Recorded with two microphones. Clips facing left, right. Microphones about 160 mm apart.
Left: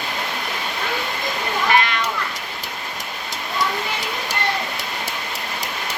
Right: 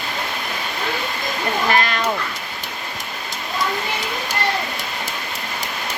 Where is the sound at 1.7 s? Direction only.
40° right (ahead or behind).